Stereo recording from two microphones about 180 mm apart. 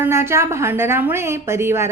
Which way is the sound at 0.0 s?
15° right (ahead or behind).